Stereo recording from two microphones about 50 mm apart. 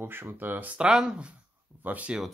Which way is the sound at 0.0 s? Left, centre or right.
Right.